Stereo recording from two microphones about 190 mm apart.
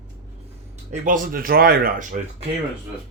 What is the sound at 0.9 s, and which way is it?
Speech, 45° right (ahead or behind).